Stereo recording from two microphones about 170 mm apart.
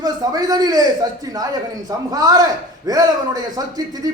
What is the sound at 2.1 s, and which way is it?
A man's voice, 20° right (ahead or behind).